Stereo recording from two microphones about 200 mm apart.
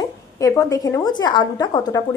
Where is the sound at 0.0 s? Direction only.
15° left (ahead or behind).